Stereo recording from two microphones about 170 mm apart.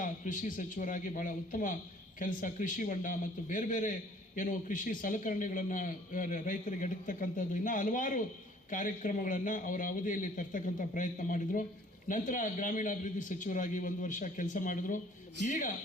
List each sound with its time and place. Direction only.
0.0 s a man's voice: 50° left (ahead or behind)